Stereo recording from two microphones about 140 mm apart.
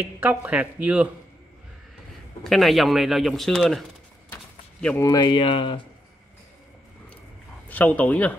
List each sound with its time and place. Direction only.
0.0 s speech: 10° right (ahead or behind)
2.4 s speech: centre (ahead or behind)
4.9 s speech: 25° left (ahead or behind)
7.6 s speech: 10° left (ahead or behind)